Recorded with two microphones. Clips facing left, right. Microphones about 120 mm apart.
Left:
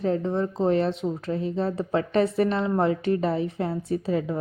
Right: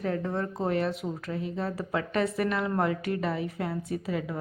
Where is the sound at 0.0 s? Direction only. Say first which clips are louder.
Left 5 dB; 25° left (ahead or behind).